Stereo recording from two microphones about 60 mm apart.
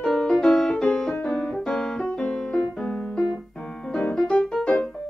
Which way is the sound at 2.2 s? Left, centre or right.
Centre.